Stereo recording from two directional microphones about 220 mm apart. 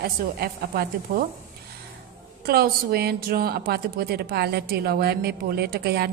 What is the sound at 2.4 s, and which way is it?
Speech, 45° right (ahead or behind).